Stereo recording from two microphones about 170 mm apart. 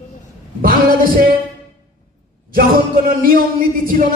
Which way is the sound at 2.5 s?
55° right (ahead or behind).